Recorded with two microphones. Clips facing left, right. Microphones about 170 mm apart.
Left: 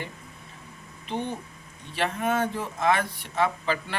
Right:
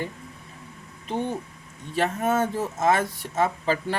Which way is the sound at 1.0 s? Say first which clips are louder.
Right 3 dB; 45° right (ahead or behind).